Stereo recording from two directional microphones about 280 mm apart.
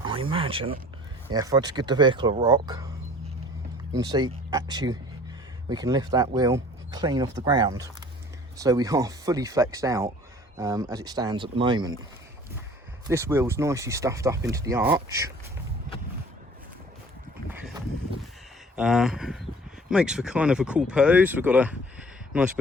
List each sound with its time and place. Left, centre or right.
0.0 s speech: centre
3.9 s speech: centre
13.1 s speech: centre
18.8 s speech: centre